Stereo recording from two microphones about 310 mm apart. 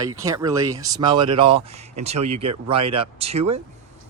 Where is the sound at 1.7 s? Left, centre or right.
Right.